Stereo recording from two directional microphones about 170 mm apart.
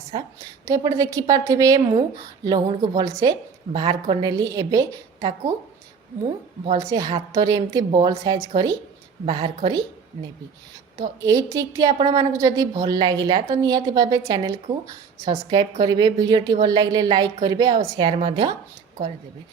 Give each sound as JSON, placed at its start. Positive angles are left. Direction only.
{"t": 0.1, "sound": "a woman's voice", "side_deg": -25}
{"t": 6.7, "sound": "a woman's voice", "side_deg": -25}
{"t": 11.0, "sound": "a woman's voice", "side_deg": -20}